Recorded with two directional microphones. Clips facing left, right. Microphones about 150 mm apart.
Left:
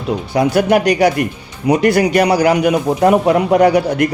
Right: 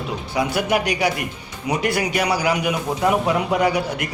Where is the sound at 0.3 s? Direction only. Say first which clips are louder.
Left 8 dB; 45° left (ahead or behind).